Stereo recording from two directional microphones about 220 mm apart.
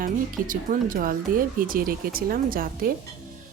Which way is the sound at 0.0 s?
40° right (ahead or behind).